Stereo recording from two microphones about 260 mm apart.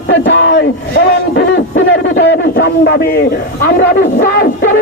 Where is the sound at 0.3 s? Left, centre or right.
Left.